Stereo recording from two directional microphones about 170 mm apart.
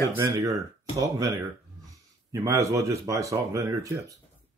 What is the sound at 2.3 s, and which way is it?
Speech, 20° right (ahead or behind).